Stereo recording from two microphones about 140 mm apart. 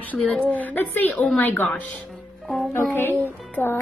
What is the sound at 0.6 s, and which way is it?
A woman's voice, 10° left (ahead or behind).